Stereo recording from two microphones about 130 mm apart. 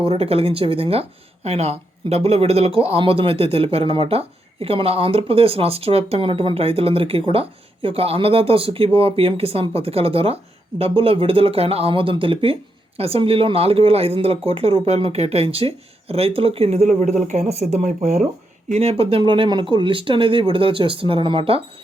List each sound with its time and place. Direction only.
0.0 s a man's voice: 50° right (ahead or behind); by 18.2 s 65° right (ahead or behind)
18.7 s a man's voice: 55° right (ahead or behind)